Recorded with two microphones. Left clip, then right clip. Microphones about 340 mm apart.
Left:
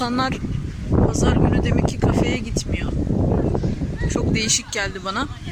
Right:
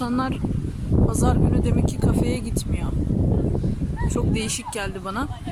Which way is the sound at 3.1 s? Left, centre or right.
Left.